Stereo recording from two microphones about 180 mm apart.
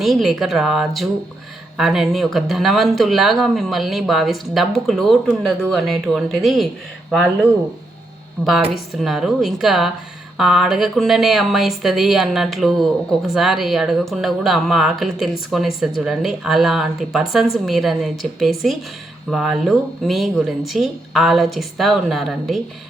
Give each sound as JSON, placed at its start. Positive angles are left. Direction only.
{"t": 0.0, "sound": "speech", "side_deg": 0}
{"t": 8.4, "sound": "speech", "side_deg": 0}